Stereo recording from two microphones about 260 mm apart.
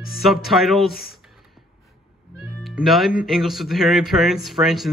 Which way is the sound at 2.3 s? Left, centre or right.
Centre.